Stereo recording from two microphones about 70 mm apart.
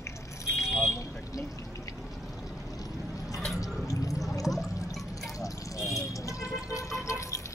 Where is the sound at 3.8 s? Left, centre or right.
Left.